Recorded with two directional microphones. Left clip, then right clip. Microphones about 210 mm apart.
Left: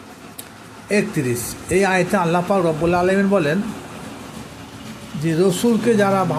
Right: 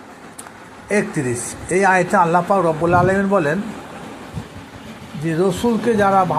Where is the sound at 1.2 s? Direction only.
20° left (ahead or behind).